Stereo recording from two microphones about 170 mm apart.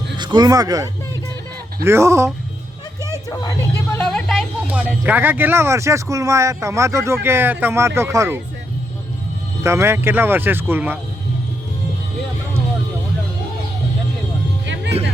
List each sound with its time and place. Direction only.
0.2 s speech: 25° right (ahead or behind)
3.9 s speech: 5° left (ahead or behind); by 8.4 s 15° right (ahead or behind)
9.6 s speech: 15° right (ahead or behind)